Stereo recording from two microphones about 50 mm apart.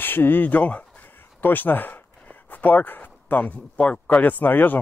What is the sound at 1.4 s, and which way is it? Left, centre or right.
Speech, left.